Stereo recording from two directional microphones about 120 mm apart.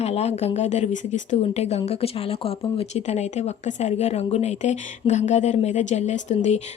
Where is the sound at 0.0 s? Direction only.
60° left (ahead or behind).